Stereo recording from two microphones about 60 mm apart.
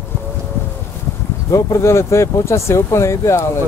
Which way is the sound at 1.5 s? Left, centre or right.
Left.